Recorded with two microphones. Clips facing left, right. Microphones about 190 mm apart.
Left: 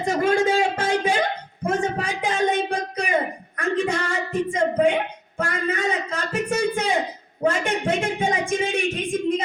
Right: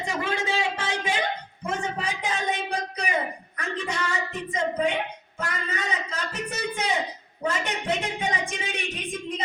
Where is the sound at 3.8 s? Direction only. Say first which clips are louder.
Left 5 dB; 50° left (ahead or behind).